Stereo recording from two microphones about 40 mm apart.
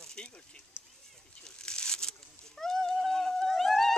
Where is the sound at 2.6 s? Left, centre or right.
Centre.